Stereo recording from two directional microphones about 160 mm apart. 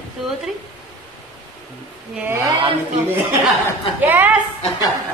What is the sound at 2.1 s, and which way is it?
Speech, 15° right (ahead or behind).